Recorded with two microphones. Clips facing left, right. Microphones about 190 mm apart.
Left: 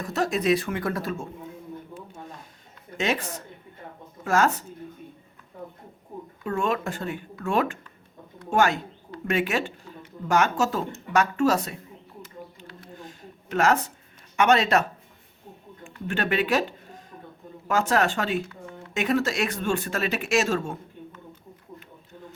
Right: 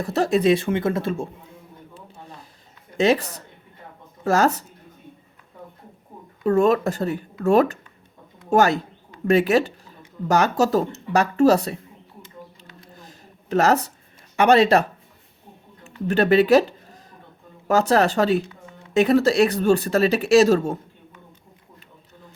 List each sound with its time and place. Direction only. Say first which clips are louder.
0.0 s speech: right 6 dB; 30° right (ahead or behind)
3.0 s speech: right 8 dB; 35° right (ahead or behind)
6.4 s speech: right 9 dB; 40° right (ahead or behind)
13.0 s a sound: left 4 dB; 35° right (ahead or behind)
14.3 s speech: right 5 dB; 35° right (ahead or behind)
16.0 s speech: right 9 dB; 35° right (ahead or behind)